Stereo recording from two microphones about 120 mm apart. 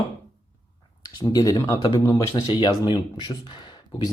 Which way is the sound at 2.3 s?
40° left (ahead or behind).